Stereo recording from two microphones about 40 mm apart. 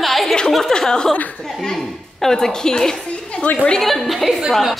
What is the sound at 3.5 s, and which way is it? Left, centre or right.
Speech, left.